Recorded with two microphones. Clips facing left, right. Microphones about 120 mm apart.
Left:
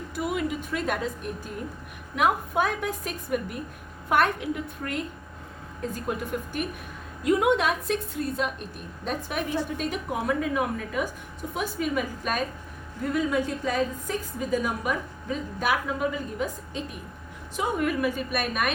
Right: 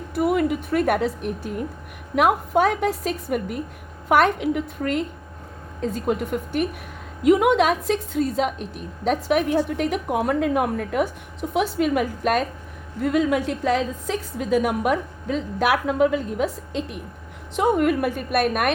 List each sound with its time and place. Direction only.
0.2 s a woman's voice: 55° right (ahead or behind); by 6.7 s 70° right (ahead or behind)
7.3 s a woman's voice: 90° right; by 12.5 s 70° right (ahead or behind)
13.0 s a woman's voice: 85° right
17.6 s speech: 60° right (ahead or behind)